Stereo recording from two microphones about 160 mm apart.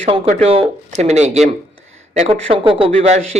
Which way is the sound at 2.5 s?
35° right (ahead or behind).